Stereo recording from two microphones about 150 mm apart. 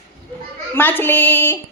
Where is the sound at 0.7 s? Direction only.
10° left (ahead or behind).